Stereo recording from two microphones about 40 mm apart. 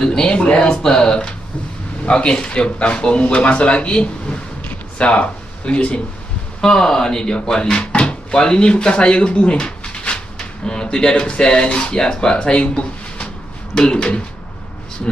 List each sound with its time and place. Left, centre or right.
0.0 s speech: centre
0.3 s speech: left
6.6 s speech: centre
13.7 s speech: centre